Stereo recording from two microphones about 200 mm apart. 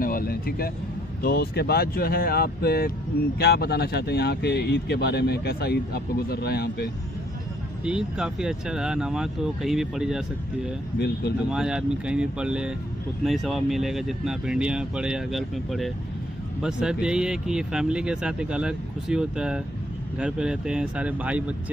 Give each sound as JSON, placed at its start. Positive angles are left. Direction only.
{"t": 0.0, "sound": "speech", "side_deg": 45}
{"t": 7.8, "sound": "speech", "side_deg": -5}